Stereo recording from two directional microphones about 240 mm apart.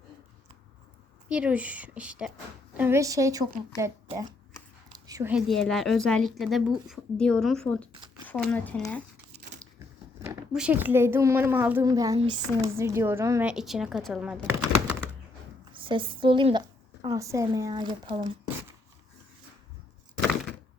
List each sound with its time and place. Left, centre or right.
1.3 s a woman's voice: centre
4.9 s dog: centre
5.5 s a woman's voice: centre
9.3 s a sound: right
10.2 s a child's voice: centre
15.7 s a woman's voice: right